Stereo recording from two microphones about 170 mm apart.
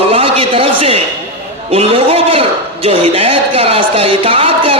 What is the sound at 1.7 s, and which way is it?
A man's voice, 35° right (ahead or behind).